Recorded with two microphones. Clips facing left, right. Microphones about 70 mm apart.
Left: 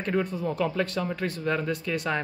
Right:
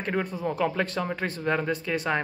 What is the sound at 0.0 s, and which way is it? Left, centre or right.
Speech, right.